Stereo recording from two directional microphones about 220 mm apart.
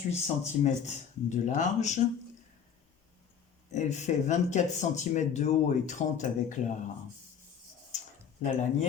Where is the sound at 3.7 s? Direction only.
30° left (ahead or behind).